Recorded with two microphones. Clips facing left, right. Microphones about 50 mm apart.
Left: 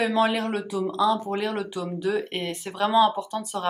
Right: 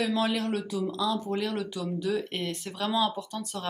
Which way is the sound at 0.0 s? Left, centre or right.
Centre.